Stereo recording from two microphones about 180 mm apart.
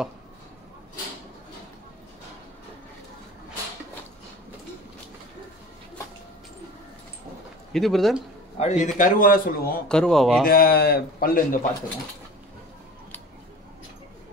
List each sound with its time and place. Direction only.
7.7 s speech: centre (ahead or behind)
8.5 s a man's voice: 40° left (ahead or behind)
9.8 s speech: 5° left (ahead or behind)
10.4 s a man's voice: 55° left (ahead or behind)